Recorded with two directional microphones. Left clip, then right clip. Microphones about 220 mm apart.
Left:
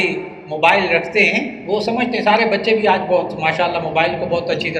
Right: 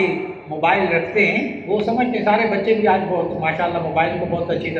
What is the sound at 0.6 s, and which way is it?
A man's voice, 45° left (ahead or behind).